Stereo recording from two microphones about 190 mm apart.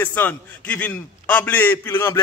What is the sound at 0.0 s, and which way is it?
A man's voice, 10° left (ahead or behind).